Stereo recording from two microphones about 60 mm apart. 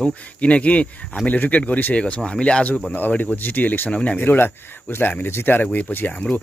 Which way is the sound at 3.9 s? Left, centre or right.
Left.